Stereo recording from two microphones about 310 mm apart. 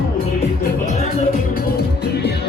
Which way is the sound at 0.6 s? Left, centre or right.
Left.